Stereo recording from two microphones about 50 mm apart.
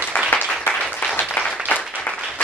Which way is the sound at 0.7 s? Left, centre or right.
Left.